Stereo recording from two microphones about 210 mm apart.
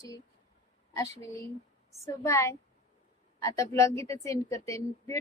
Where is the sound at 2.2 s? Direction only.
15° left (ahead or behind).